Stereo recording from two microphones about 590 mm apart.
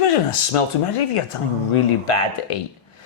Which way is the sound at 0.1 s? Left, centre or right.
Left.